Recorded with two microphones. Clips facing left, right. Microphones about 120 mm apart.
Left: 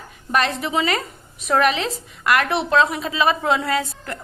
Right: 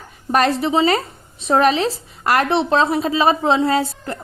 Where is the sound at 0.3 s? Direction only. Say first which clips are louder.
Right 5 dB; 35° right (ahead or behind).